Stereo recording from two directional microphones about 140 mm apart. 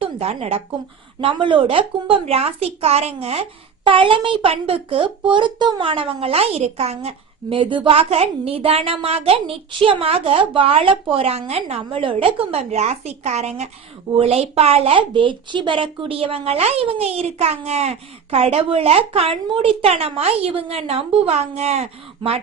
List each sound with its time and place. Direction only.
0.0 s speech: 45° right (ahead or behind)
1.2 s a woman's voice: 35° right (ahead or behind)
7.5 s a woman's voice: 35° right (ahead or behind)